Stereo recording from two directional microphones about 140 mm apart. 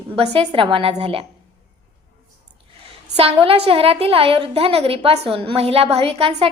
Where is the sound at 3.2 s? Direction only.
45° right (ahead or behind).